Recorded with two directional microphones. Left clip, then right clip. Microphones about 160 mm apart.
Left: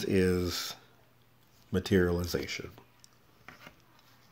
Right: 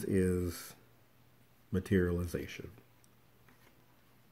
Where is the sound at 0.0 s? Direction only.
20° right (ahead or behind).